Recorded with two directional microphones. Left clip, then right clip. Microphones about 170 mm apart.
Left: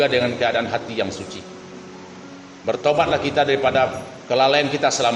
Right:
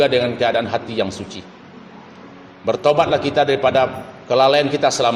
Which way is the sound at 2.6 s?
35° right (ahead or behind).